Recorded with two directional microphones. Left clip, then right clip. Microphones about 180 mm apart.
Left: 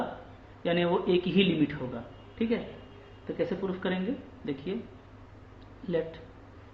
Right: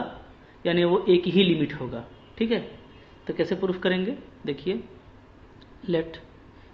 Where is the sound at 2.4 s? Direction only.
50° right (ahead or behind).